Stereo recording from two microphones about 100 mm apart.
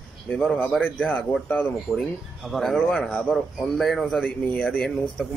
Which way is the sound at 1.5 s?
5° left (ahead or behind).